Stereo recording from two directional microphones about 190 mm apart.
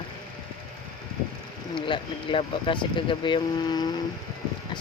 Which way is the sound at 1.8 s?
25° left (ahead or behind).